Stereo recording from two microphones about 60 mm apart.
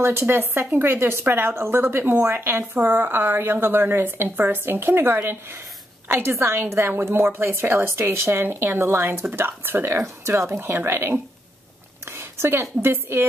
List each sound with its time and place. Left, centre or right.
0.0 s a woman's voice: right
9.9 s a woman's voice: right
10.6 s a woman's voice: right